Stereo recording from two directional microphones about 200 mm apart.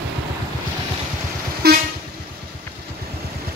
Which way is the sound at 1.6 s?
50° right (ahead or behind).